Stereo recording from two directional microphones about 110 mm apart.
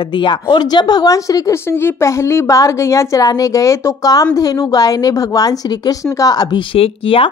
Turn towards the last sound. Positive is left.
turn(degrees=60)  # may be behind; listen again after turning